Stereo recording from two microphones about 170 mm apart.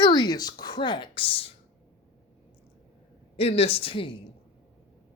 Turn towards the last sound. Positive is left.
turn(degrees=30)  # may be behind; listen again after turning